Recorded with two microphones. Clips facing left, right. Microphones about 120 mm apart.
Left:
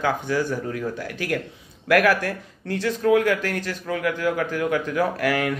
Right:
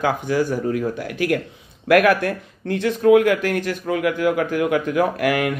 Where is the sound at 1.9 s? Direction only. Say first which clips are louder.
Right 4 dB; 20° right (ahead or behind).